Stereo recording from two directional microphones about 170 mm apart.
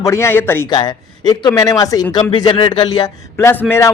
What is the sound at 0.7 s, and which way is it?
A man's voice, 25° left (ahead or behind).